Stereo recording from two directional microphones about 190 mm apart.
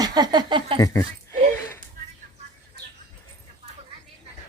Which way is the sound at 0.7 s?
15° left (ahead or behind).